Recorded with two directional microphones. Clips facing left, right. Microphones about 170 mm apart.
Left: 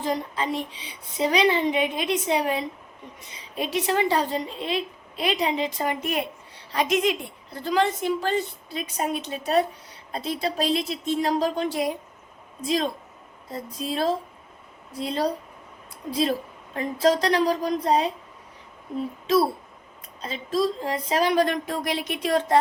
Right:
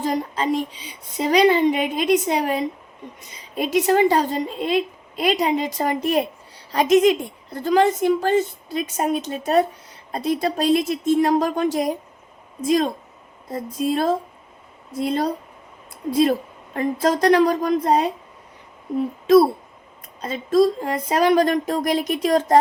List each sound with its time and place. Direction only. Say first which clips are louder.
0.0 s a woman's voice: right 4 dB; 40° right (ahead or behind)
16.7 s a woman's voice: right 1 dB; 50° right (ahead or behind)
20.2 s a woman's voice: right 7 dB; 45° right (ahead or behind)